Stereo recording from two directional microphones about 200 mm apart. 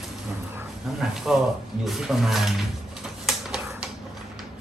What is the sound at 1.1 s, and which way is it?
Speech, centre (ahead or behind).